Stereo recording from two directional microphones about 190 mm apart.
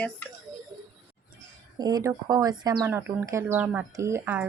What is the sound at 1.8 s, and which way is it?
Speech, 20° right (ahead or behind).